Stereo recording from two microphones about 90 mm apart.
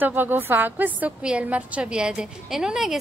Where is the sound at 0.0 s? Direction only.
20° right (ahead or behind).